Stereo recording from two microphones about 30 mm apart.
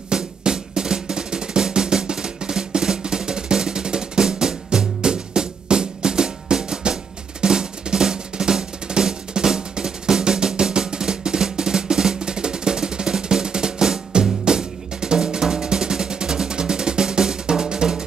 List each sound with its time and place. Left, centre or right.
0.1 s drum: right